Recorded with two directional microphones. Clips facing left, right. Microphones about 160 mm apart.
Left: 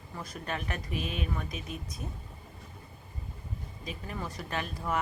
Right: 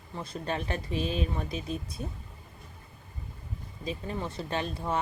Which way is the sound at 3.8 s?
30° right (ahead or behind).